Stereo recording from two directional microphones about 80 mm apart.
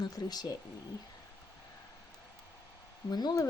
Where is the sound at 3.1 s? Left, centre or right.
Left.